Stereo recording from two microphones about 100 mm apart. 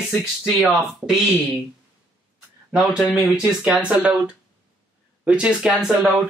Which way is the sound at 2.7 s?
5° right (ahead or behind).